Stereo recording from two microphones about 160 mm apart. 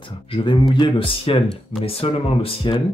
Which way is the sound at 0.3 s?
35° left (ahead or behind).